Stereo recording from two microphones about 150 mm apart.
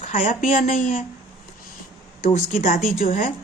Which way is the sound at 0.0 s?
55° left (ahead or behind).